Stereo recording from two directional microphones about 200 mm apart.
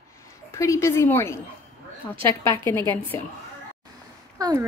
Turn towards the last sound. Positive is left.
turn(degrees=-20)  # may be behind; listen again after turning